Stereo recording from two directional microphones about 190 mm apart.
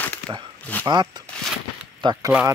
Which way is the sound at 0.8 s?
20° right (ahead or behind).